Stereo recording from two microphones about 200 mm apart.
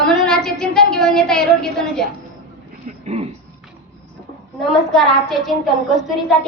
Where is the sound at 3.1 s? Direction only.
30° right (ahead or behind).